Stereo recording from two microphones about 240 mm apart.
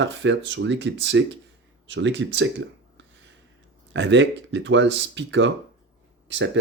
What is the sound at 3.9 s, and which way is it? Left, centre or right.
Speech, right.